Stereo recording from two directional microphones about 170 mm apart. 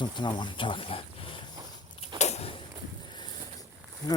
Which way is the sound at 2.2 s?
40° left (ahead or behind).